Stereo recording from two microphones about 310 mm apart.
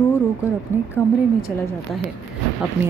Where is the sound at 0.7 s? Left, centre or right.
Centre.